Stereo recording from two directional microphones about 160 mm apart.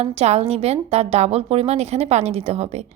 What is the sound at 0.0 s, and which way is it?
A woman's voice, 40° right (ahead or behind).